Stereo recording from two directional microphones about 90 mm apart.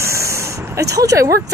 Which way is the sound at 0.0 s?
35° right (ahead or behind).